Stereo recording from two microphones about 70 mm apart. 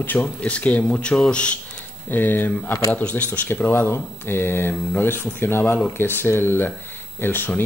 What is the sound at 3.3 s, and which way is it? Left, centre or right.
Speech, left.